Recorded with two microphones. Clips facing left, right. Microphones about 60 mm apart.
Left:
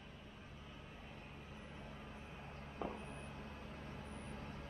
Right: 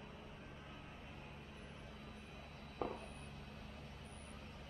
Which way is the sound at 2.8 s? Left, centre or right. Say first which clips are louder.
Right 2 dB; centre.